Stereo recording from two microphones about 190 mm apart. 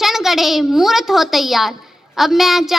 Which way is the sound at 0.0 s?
Centre (ahead or behind).